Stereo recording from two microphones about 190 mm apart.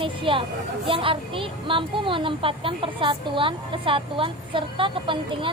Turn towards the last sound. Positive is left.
turn(degrees=-25)  # may be behind; listen again after turning